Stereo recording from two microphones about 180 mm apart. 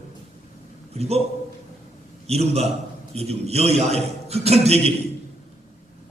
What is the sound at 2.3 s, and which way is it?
A man's voice, 35° right (ahead or behind).